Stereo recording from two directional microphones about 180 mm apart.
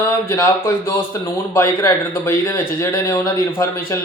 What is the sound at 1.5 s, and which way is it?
Speech, 15° left (ahead or behind).